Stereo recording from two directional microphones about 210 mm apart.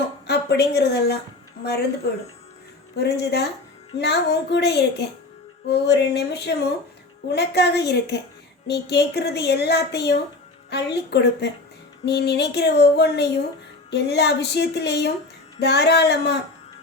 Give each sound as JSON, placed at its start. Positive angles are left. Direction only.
{"t": 0.3, "sound": "a woman's voice", "side_deg": 50}
{"t": 2.9, "sound": "speech", "side_deg": 50}